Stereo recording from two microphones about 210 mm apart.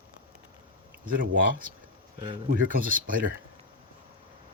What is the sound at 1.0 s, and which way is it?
Speech, 40° right (ahead or behind).